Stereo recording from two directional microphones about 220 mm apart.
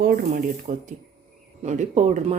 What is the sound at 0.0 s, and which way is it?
Speech, 40° right (ahead or behind).